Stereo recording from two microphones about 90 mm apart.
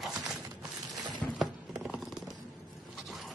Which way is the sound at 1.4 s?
Centre (ahead or behind).